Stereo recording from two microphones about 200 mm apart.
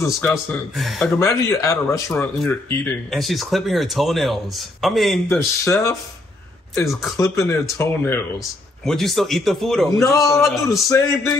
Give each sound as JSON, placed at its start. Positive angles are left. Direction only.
{"t": 0.0, "sound": "speech", "side_deg": 10}
{"t": 1.1, "sound": "speech", "side_deg": 15}
{"t": 6.9, "sound": "speech", "side_deg": 0}
{"t": 7.2, "sound": "speech", "side_deg": 15}
{"t": 8.8, "sound": "speech", "side_deg": 0}
{"t": 9.9, "sound": "speech", "side_deg": 15}
{"t": 10.4, "sound": "speech", "side_deg": 0}
{"t": 10.9, "sound": "speech", "side_deg": 15}